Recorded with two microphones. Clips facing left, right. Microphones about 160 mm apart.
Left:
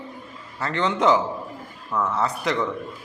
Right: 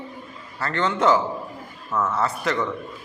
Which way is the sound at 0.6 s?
15° left (ahead or behind).